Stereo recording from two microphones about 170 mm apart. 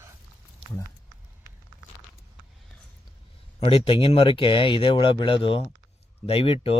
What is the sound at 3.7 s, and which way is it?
Speech, 30° left (ahead or behind).